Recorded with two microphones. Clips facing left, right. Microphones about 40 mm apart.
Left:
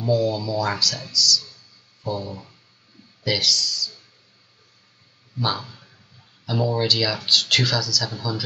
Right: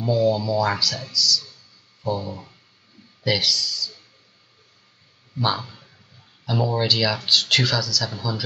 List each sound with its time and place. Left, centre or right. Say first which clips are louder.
0.1 s speech: right 2 dB; centre
5.4 s speech: right 2 dB; centre